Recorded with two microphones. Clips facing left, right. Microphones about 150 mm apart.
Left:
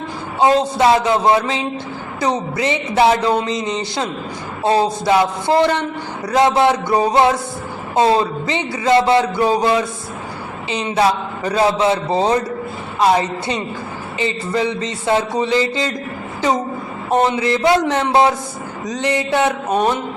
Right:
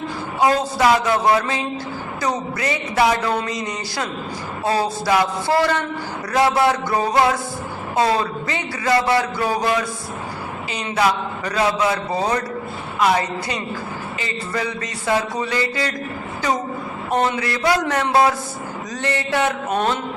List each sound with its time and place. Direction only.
0.3 s speech: 25° left (ahead or behind)
17.1 s speech: 20° left (ahead or behind)
18.9 s mantra: 20° left (ahead or behind)